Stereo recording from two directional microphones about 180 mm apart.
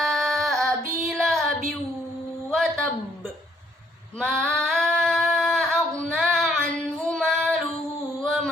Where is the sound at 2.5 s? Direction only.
Centre (ahead or behind).